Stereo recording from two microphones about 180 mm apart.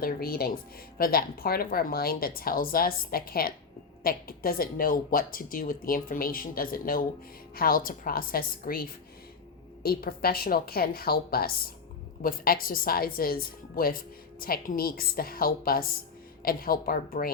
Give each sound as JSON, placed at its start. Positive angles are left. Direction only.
{"t": 0.0, "sound": "a woman's voice", "side_deg": 55}